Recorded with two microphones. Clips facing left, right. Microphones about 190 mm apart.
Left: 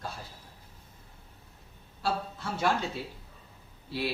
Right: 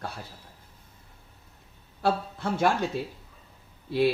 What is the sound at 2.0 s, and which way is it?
Speech, 55° right (ahead or behind).